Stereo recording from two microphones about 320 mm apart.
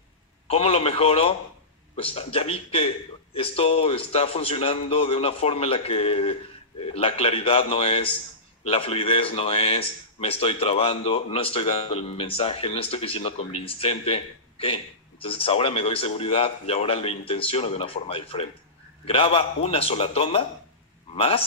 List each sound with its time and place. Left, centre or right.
0.5 s a man's voice: centre